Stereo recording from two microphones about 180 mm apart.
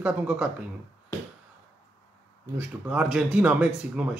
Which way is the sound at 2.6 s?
5° right (ahead or behind).